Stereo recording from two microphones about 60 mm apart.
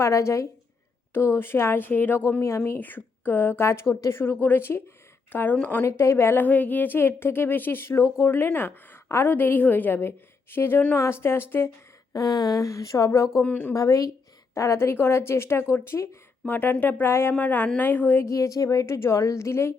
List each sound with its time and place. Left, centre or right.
0.0 s a woman's voice: left
1.1 s speech: left
1.8 s a woman's voice: left
5.8 s speech: left
6.4 s a woman's voice: left
9.2 s a woman's voice: left
12.1 s speech: left
13.4 s speech: left
13.7 s speech: left
14.5 s speech: left
16.5 s a woman's voice: left
17.3 s a woman's voice: left
18.3 s speech: left
18.9 s speech: left